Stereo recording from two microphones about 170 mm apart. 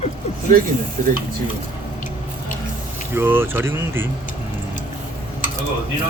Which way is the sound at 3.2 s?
15° right (ahead or behind).